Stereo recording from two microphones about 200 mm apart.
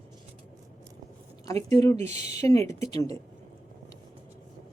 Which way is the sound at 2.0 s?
30° right (ahead or behind).